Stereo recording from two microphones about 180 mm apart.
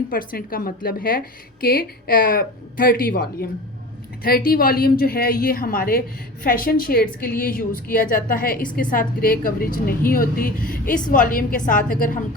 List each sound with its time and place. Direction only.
0.1 s a woman's voice: 50° left (ahead or behind)